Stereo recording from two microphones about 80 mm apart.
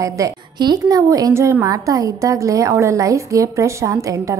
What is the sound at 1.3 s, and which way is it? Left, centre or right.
A woman's voice, right.